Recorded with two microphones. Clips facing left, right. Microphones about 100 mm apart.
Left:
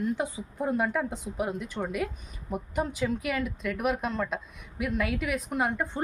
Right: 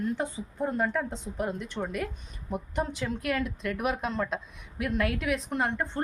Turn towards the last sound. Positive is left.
turn(degrees=5)  # may be behind; listen again after turning